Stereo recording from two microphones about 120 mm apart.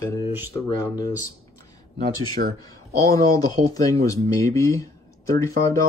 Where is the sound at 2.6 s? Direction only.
30° left (ahead or behind).